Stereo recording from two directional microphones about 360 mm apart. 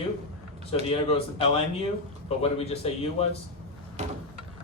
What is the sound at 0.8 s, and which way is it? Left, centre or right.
Speech, centre.